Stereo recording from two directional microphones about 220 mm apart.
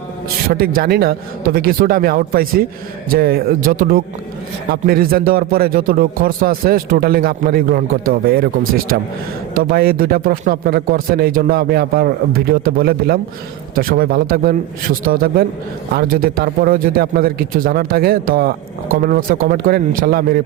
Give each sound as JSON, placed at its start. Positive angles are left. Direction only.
{"t": 0.5, "sound": "speech", "side_deg": -40}